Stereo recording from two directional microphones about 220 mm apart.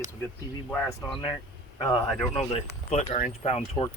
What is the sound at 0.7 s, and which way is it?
Speech, 10° left (ahead or behind).